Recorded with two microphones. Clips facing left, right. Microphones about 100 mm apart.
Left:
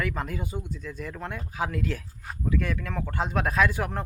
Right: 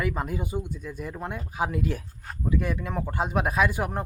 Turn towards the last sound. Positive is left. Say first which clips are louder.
# even
turn(degrees=-15)  # may be behind; listen again after turning